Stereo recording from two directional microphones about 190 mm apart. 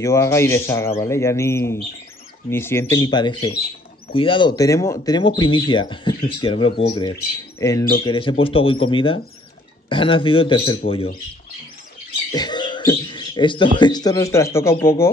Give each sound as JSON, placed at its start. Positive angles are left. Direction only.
{"t": 0.0, "sound": "a man's voice", "side_deg": 15}
{"t": 8.0, "sound": "speech", "side_deg": 25}
{"t": 12.4, "sound": "a sound", "side_deg": 25}
{"t": 13.7, "sound": "a man's voice", "side_deg": 20}